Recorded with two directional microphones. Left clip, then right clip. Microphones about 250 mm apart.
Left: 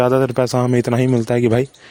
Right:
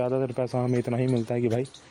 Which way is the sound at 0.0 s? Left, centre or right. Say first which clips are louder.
Left 11 dB; left.